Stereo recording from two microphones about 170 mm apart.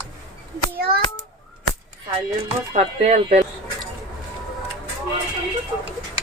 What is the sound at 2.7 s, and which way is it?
Speech, 40° right (ahead or behind).